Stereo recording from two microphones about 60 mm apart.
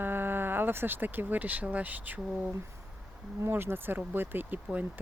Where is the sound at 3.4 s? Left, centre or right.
Right.